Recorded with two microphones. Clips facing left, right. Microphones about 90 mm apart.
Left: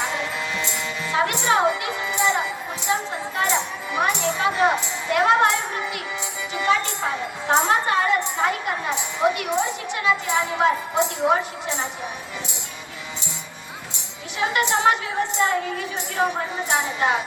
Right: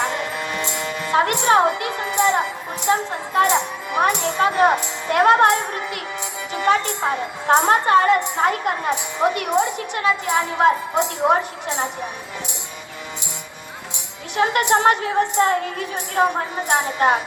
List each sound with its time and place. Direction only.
0.1 s music: 55° right (ahead or behind)
3.3 s a woman's voice: 55° right (ahead or behind)
6.5 s music: 55° right (ahead or behind)
7.4 s a woman's voice: 50° right (ahead or behind)
14.3 s a woman's voice: 50° right (ahead or behind)